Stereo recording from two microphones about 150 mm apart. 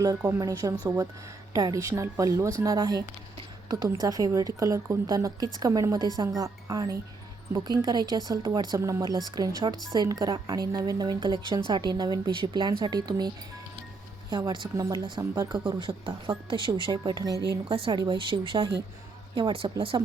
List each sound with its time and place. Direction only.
0.3 s a woman's voice: 25° right (ahead or behind)